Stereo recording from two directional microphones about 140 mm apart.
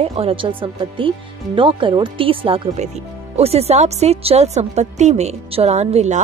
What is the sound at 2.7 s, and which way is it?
A woman's voice, 55° right (ahead or behind).